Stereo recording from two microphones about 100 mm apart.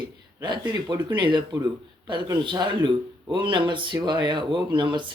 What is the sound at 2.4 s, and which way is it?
Speech, 50° right (ahead or behind).